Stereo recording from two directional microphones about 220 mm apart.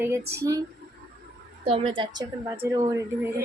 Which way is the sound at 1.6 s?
25° right (ahead or behind).